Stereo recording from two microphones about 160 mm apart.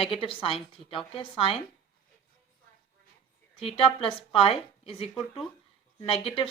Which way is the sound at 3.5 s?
35° left (ahead or behind).